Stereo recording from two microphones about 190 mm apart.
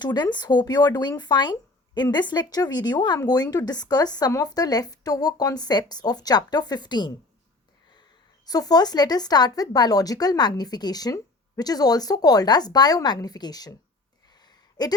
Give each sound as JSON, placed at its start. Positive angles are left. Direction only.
{"t": 0.0, "sound": "speech", "side_deg": 25}
{"t": 8.4, "sound": "speech", "side_deg": 20}
{"t": 14.4, "sound": "a sound", "side_deg": 20}